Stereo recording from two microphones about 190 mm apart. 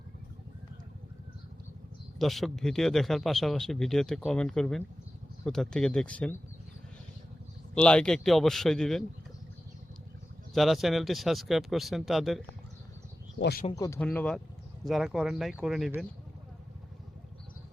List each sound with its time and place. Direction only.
2.1 s speech: centre (ahead or behind)
7.8 s speech: 5° left (ahead or behind)
10.5 s speech: centre (ahead or behind)
13.4 s speech: 55° left (ahead or behind)
13.7 s speech: 15° left (ahead or behind); by 16.0 s centre (ahead or behind)